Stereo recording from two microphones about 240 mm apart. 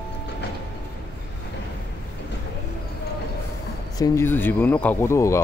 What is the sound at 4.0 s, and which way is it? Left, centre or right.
Speech, centre.